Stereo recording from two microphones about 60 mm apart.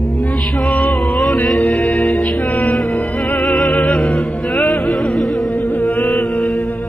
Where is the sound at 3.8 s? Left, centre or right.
Left.